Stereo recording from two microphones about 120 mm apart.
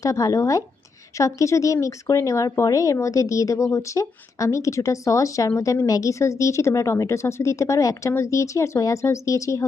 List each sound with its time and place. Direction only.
0.0 s speech: 25° left (ahead or behind)